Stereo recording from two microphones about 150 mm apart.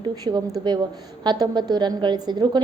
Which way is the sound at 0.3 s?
30° right (ahead or behind).